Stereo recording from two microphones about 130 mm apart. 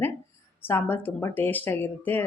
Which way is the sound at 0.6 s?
15° left (ahead or behind).